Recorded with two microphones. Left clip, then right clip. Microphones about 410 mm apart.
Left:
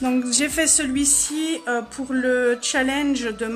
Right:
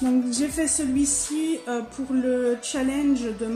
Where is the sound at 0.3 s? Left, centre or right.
Left.